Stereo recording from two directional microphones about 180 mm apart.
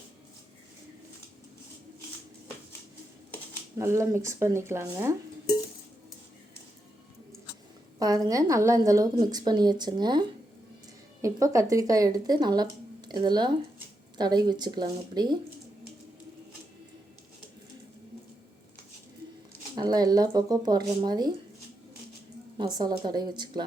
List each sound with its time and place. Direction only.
3.8 s speech: 15° right (ahead or behind)
7.9 s speech: 20° right (ahead or behind)
19.7 s speech: 20° right (ahead or behind)
22.5 s speech: 25° right (ahead or behind)